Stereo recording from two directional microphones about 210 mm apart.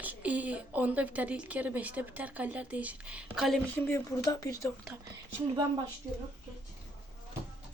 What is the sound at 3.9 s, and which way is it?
Speech, 15° left (ahead or behind).